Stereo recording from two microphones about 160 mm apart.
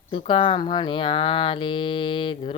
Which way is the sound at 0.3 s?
35° left (ahead or behind).